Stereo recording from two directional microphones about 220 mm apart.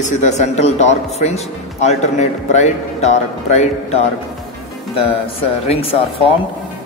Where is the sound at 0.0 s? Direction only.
35° left (ahead or behind).